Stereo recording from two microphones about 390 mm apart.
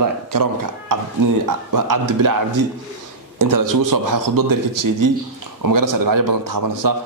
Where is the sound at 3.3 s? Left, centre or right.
Right.